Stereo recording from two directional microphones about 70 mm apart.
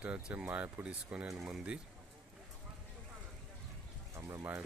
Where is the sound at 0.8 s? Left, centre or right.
Centre.